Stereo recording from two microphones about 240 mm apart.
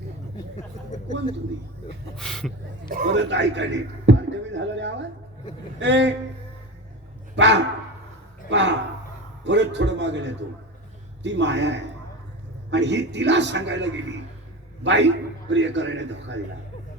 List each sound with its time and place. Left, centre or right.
2.1 s speech: centre
2.9 s a man's voice: right
3.2 s a man's voice: right
7.3 s a man's voice: right
14.8 s a man's voice: right